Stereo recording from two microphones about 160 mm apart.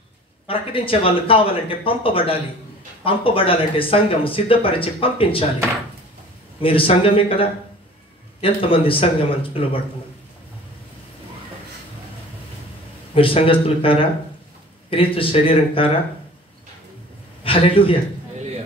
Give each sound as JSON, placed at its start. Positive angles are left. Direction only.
{"t": 0.5, "sound": "speech", "side_deg": 35}
{"t": 6.6, "sound": "speech", "side_deg": 35}
{"t": 13.1, "sound": "speech", "side_deg": 35}
{"t": 17.4, "sound": "a man's voice", "side_deg": 35}